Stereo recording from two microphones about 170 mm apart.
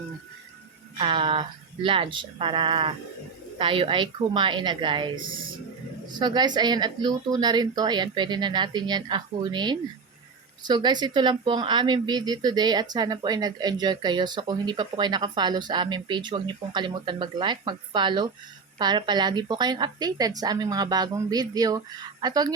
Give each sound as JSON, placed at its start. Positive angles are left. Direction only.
{"t": 0.9, "sound": "speech", "side_deg": -30}
{"t": 6.1, "sound": "speech", "side_deg": -25}